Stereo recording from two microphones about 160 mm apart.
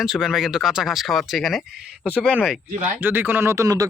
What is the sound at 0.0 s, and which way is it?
Speech, 5° right (ahead or behind).